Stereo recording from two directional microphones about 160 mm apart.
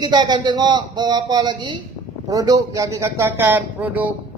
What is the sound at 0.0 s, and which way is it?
A man's voice, 25° right (ahead or behind).